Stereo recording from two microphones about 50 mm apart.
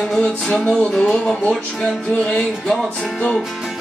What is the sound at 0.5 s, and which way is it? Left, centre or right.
Music, left.